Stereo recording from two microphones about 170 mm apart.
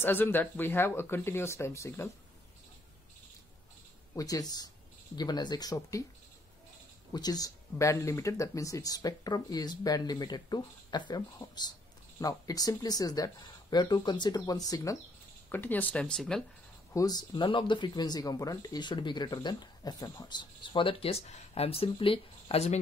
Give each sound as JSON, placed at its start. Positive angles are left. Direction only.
{"t": 0.0, "sound": "speech", "side_deg": 10}
{"t": 4.1, "sound": "speech", "side_deg": 20}
{"t": 7.1, "sound": "speech", "side_deg": 20}
{"t": 15.5, "sound": "speech", "side_deg": 10}
{"t": 16.9, "sound": "speech", "side_deg": 20}